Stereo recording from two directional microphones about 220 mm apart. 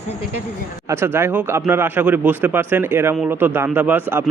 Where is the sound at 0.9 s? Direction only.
10° right (ahead or behind).